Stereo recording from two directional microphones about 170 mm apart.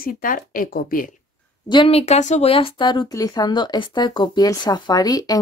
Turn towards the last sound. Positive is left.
turn(degrees=20)  # may be behind; listen again after turning